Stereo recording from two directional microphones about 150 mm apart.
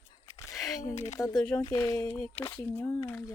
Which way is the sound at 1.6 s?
20° left (ahead or behind).